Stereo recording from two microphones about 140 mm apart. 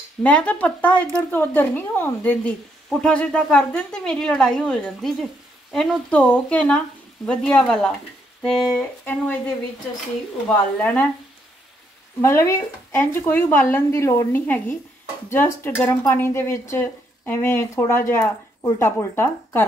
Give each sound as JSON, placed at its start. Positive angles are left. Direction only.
{"t": 0.2, "sound": "a woman's voice", "side_deg": 10}
{"t": 8.7, "sound": "a woman's voice", "side_deg": 10}
{"t": 10.5, "sound": "a woman's voice", "side_deg": 10}
{"t": 12.2, "sound": "a woman's voice", "side_deg": 15}